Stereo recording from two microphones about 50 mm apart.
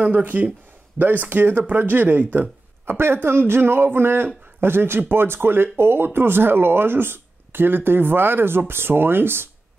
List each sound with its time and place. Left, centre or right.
0.0 s speech: right